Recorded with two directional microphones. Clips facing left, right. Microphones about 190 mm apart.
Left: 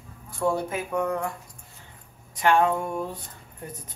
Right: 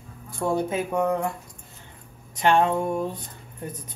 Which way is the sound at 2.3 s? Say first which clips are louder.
Right 1 dB; 25° right (ahead or behind).